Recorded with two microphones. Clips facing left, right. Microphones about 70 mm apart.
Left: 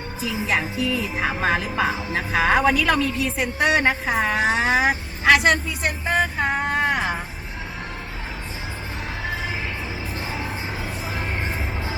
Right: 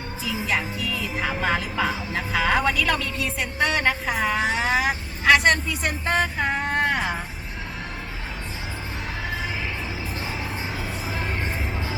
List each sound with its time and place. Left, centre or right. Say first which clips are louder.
0.3 s speech: left 2 dB; centre
1.2 s speech: left 1 dB; left
2.6 s a woman's voice: left 4 dB; centre